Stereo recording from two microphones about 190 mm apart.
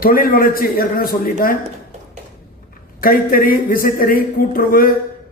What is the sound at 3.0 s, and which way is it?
Speech, 50° left (ahead or behind).